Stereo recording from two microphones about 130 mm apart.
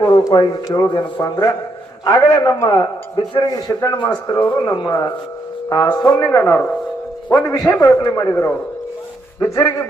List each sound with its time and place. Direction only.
0.0 s speech: 35° left (ahead or behind)
2.6 s a man's voice: 40° left (ahead or behind); by 7.5 s 15° left (ahead or behind)
7.8 s speech: 25° left (ahead or behind)